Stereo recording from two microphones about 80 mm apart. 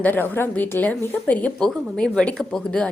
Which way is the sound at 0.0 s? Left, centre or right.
Left.